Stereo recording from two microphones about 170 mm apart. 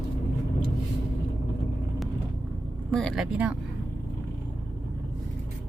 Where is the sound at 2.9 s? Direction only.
5° left (ahead or behind).